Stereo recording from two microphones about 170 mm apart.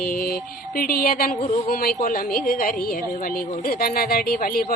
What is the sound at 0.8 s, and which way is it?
Speech, 60° left (ahead or behind).